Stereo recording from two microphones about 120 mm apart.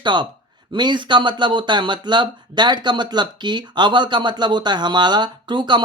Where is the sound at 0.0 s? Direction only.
40° right (ahead or behind).